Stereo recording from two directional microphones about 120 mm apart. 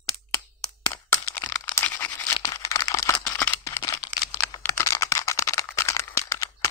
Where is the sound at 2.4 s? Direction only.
30° left (ahead or behind).